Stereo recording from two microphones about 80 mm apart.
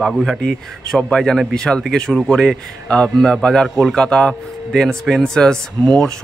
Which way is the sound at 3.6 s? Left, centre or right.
Centre.